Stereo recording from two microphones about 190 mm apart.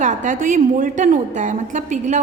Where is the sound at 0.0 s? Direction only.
40° right (ahead or behind).